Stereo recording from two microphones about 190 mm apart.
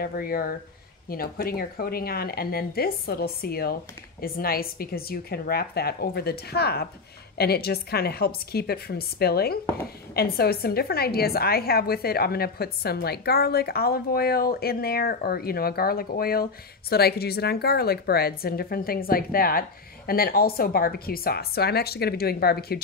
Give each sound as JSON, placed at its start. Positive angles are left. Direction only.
{"t": 0.0, "sound": "a woman's voice", "side_deg": 50}